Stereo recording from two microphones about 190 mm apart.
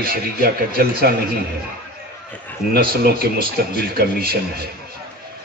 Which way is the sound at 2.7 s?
55° right (ahead or behind).